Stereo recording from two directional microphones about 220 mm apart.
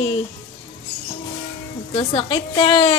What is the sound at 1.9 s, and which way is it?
Speech, 25° left (ahead or behind).